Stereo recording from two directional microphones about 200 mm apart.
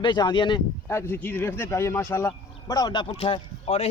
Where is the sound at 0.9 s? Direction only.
10° left (ahead or behind).